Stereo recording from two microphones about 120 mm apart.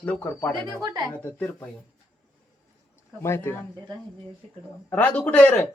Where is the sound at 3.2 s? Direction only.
20° left (ahead or behind).